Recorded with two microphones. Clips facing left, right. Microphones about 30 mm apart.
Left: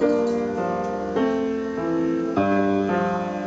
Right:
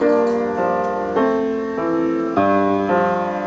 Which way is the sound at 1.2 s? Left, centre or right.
Centre.